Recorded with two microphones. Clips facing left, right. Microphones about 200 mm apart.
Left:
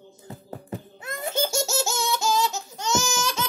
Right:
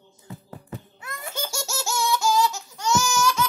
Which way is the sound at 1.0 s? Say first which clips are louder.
Left 7 dB; 25° left (ahead or behind).